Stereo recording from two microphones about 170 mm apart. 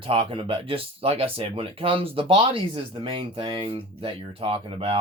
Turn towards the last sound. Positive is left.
turn(degrees=-35)  # may be behind; listen again after turning